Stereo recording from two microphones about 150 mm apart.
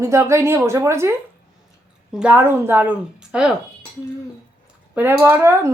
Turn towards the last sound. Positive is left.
turn(degrees=-15)  # may be behind; listen again after turning